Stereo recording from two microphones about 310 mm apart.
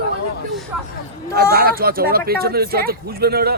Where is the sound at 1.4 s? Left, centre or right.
Right.